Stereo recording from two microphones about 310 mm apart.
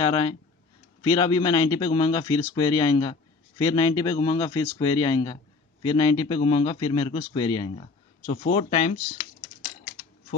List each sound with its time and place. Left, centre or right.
0.0 s a man's voice: centre